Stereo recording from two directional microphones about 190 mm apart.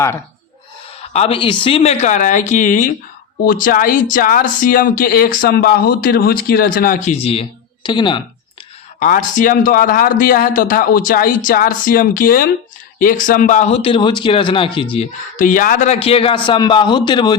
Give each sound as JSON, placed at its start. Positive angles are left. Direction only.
{"t": 1.1, "sound": "speech", "side_deg": 30}
{"t": 9.0, "sound": "speech", "side_deg": 45}
{"t": 15.4, "sound": "speech", "side_deg": 45}